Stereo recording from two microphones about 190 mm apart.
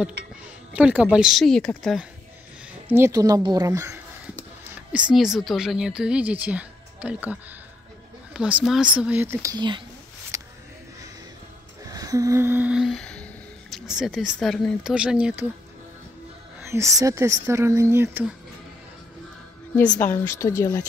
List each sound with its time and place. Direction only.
0.7 s speech: 5° right (ahead or behind)
2.9 s speech: 15° right (ahead or behind)
4.9 s speech: 5° right (ahead or behind); by 9.8 s 25° right (ahead or behind)
10.3 s a sound: 15° right (ahead or behind)
11.9 s humming: 20° right (ahead or behind)
16.6 s speech: 15° right (ahead or behind)
19.8 s speech: 5° left (ahead or behind)